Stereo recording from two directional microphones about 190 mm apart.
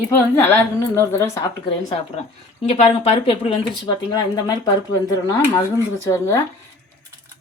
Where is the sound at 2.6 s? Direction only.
35° left (ahead or behind); by 6.4 s 15° left (ahead or behind).